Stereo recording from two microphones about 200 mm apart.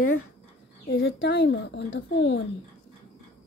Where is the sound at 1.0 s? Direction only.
60° left (ahead or behind).